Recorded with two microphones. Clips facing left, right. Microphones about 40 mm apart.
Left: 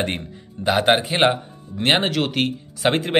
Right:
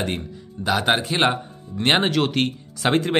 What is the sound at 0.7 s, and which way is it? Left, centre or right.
A man's voice, centre.